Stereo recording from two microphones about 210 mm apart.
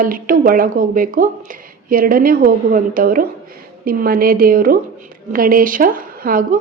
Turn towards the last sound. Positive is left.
turn(degrees=-40)  # may be behind; listen again after turning